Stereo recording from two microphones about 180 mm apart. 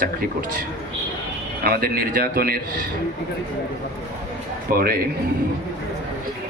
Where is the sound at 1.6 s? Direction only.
55° right (ahead or behind).